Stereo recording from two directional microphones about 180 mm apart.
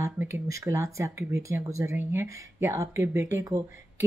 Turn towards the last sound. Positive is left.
turn(degrees=-15)  # may be behind; listen again after turning